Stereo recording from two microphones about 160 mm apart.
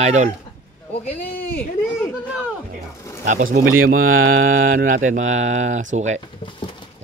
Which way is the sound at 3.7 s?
60° right (ahead or behind).